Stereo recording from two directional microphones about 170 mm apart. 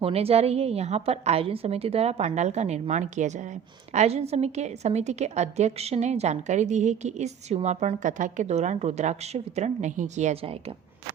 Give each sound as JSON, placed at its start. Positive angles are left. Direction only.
{"t": 0.0, "sound": "a woman's voice", "side_deg": -35}